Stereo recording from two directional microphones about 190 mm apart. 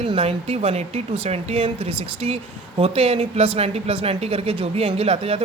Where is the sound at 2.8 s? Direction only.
30° right (ahead or behind).